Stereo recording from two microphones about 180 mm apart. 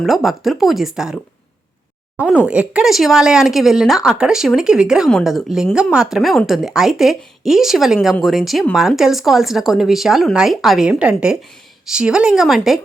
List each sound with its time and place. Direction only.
0.0 s speech: centre (ahead or behind)